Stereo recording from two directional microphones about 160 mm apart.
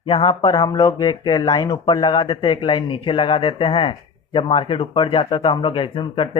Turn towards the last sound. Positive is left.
turn(degrees=30)  # may be behind; listen again after turning